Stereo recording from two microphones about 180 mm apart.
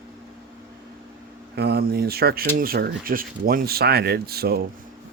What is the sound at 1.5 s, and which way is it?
Speech, 65° right (ahead or behind).